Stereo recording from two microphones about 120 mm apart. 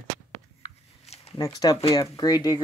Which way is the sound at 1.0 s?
60° left (ahead or behind).